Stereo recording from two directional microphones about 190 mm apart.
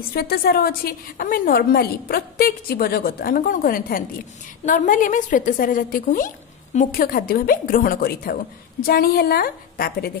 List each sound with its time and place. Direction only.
0.1 s a woman's voice: 55° left (ahead or behind)